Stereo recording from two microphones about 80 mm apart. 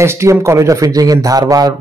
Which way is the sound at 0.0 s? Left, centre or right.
Right.